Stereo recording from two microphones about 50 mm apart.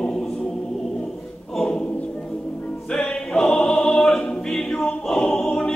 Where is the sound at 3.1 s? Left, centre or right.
Centre.